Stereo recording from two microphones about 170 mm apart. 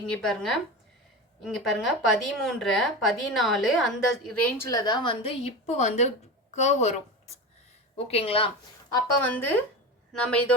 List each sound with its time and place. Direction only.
0.1 s speech: 5° left (ahead or behind)
4.4 s a woman's voice: 10° left (ahead or behind); by 6.9 s 40° left (ahead or behind)
7.9 s speech: 35° left (ahead or behind)
9.2 s a man's voice: 10° left (ahead or behind)